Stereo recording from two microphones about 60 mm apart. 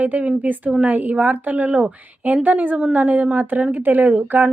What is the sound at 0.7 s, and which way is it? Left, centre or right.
A woman's voice, centre.